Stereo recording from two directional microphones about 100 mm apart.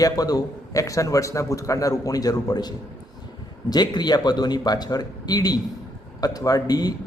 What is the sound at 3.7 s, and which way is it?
A man's voice, 45° left (ahead or behind).